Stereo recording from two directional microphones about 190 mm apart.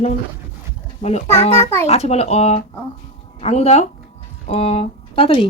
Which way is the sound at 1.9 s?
35° left (ahead or behind).